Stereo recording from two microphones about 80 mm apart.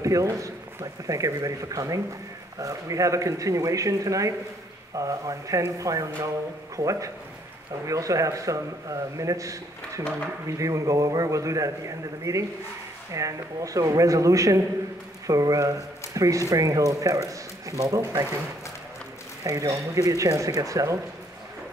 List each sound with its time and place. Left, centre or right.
0.0 s speech: right
19.4 s speech: right